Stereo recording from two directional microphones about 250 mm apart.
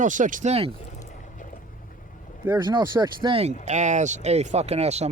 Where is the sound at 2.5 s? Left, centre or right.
Centre.